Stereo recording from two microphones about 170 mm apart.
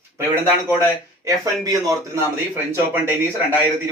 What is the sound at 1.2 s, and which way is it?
Speech, 20° right (ahead or behind).